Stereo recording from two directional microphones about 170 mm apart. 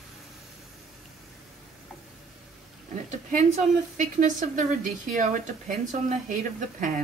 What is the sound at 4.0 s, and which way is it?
Speech, 45° right (ahead or behind).